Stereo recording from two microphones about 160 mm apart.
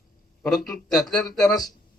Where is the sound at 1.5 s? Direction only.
25° left (ahead or behind).